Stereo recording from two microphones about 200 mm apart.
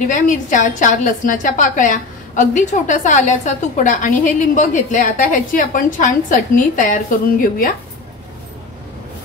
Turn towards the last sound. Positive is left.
turn(degrees=45)  # may be behind; listen again after turning